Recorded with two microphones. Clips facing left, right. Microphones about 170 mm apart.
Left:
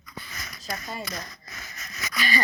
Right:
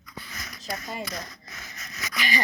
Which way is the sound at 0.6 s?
15° right (ahead or behind).